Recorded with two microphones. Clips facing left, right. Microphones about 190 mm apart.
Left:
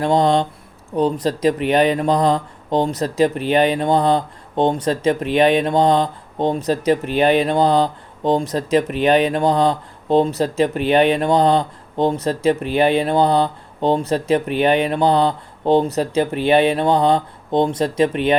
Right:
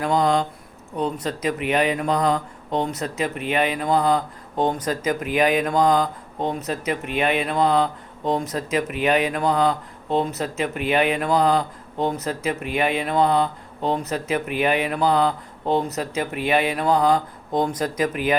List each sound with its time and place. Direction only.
0.0 s speech: 30° left (ahead or behind)